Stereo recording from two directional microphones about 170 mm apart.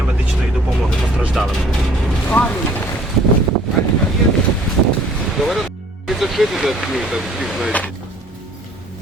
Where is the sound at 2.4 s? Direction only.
10° left (ahead or behind).